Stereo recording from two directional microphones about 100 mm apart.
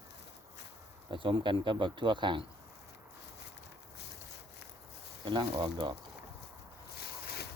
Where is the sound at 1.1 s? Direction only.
55° right (ahead or behind).